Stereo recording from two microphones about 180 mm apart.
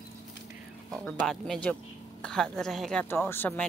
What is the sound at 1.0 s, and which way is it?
Speech, centre (ahead or behind).